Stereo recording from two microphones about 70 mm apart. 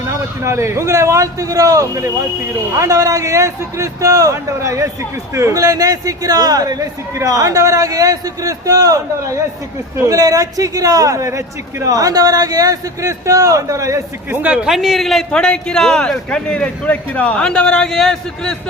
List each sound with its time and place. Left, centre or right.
0.1 s a man's voice: right
14.3 s speech: right
14.6 s a man's voice: centre